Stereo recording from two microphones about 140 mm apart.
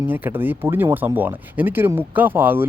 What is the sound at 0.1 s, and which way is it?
A man's voice, 15° right (ahead or behind).